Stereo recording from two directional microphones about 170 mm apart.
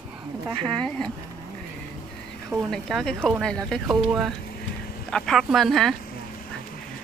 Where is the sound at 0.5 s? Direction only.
30° right (ahead or behind).